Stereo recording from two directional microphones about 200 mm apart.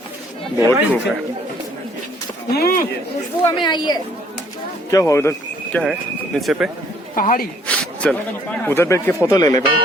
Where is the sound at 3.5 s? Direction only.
20° left (ahead or behind).